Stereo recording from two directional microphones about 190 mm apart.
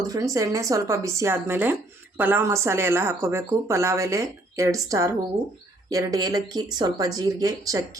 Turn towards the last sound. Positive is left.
turn(degrees=-15)  # may be behind; listen again after turning